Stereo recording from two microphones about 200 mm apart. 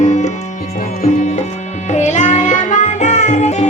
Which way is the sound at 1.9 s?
35° left (ahead or behind).